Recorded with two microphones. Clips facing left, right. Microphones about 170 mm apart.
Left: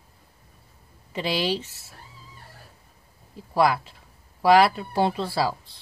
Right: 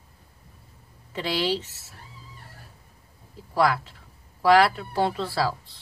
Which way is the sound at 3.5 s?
15° left (ahead or behind).